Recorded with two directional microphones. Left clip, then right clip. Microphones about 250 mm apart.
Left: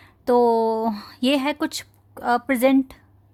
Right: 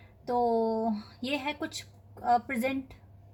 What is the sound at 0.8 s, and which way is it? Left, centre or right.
Speech, left.